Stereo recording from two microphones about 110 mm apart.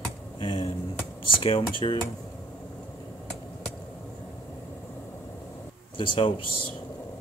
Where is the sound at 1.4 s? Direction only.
50° left (ahead or behind).